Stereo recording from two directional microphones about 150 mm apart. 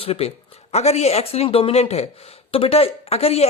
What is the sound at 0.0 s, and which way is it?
Speech, 40° left (ahead or behind).